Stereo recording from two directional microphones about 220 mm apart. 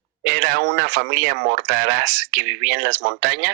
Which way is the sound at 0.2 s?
45° right (ahead or behind).